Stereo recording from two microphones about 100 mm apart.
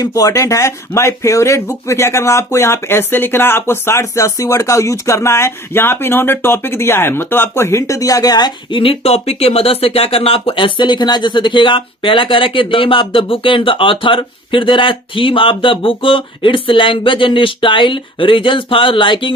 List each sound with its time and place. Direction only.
0.0 s speech: 35° left (ahead or behind)
8.8 s speech: 75° left (ahead or behind); by 19.3 s 55° left (ahead or behind)